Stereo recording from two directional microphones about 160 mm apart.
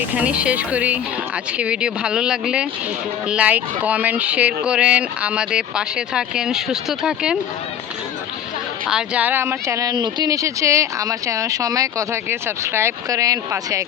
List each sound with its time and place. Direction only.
0.1 s speech: 10° right (ahead or behind)
8.9 s speech: 5° right (ahead or behind)